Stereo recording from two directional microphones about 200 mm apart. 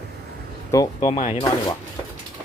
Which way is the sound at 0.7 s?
20° left (ahead or behind).